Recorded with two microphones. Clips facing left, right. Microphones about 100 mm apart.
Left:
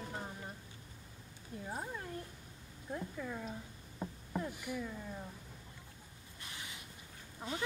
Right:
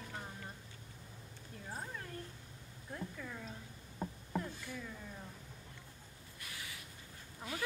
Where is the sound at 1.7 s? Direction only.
15° left (ahead or behind).